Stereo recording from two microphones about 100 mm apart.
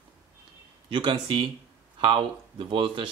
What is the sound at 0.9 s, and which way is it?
Speech, 55° right (ahead or behind).